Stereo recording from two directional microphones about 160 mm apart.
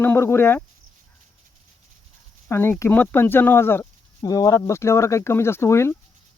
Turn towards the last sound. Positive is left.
turn(degrees=15)  # may be behind; listen again after turning